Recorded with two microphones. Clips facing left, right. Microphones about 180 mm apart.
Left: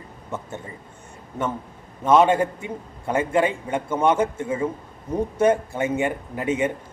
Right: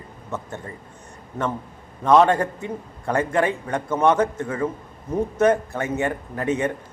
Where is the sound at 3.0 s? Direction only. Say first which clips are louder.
Right 1 dB; 20° left (ahead or behind).